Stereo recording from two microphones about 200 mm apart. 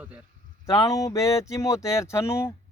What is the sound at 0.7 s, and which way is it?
Speech, 15° left (ahead or behind).